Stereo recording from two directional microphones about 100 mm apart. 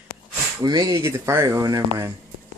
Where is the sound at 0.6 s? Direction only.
40° right (ahead or behind).